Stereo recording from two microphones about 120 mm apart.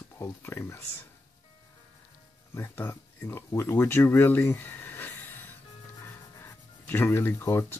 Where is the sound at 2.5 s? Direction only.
15° left (ahead or behind).